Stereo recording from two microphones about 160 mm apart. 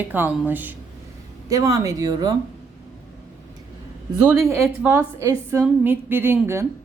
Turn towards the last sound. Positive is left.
turn(degrees=-15)  # may be behind; listen again after turning